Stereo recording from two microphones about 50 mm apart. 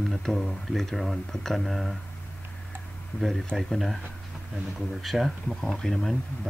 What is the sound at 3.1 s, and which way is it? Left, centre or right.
Speech, left.